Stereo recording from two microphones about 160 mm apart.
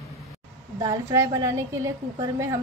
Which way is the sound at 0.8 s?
25° right (ahead or behind).